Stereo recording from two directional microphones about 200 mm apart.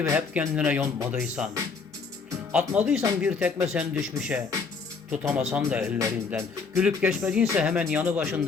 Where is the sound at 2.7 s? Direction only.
5° right (ahead or behind).